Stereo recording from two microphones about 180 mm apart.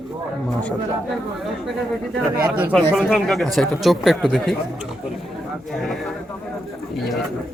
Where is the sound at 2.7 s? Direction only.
5° left (ahead or behind).